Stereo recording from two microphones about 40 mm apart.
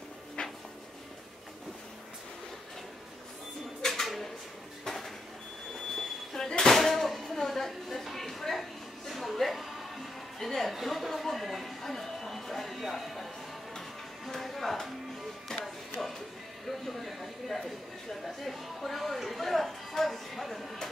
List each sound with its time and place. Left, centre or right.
0.4 s music: left
3.8 s bird: centre
4.8 s a sound: centre
14.2 s music: centre
16.6 s a sound: centre
18.2 s music: centre